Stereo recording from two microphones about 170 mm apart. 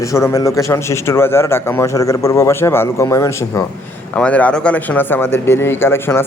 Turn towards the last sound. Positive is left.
turn(degrees=15)  # may be behind; listen again after turning